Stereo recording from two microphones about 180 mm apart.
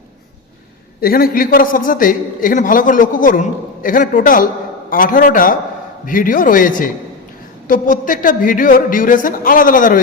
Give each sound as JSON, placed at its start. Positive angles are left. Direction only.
{"t": 1.0, "sound": "a man's voice", "side_deg": 55}